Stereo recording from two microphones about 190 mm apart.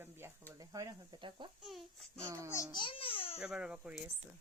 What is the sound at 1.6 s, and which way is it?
Speech, centre (ahead or behind).